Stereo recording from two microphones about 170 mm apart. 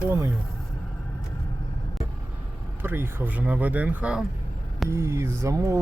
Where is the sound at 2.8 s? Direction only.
15° right (ahead or behind).